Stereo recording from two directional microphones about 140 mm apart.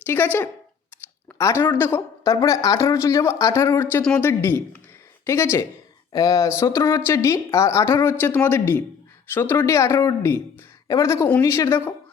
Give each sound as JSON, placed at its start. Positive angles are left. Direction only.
{"t": 0.0, "sound": "speech", "side_deg": 15}
{"t": 1.4, "sound": "speech", "side_deg": 20}